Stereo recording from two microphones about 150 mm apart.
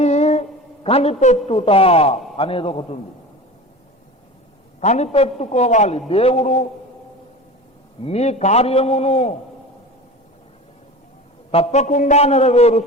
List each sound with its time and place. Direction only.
0.0 s a sound: 50° left (ahead or behind)
0.9 s a man's voice: 45° left (ahead or behind)
4.8 s a man's voice: 50° left (ahead or behind)
8.0 s a man's voice: 45° left (ahead or behind)
11.5 s a man's voice: 50° left (ahead or behind)